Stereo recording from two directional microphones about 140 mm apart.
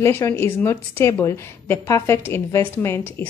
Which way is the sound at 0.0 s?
20° left (ahead or behind).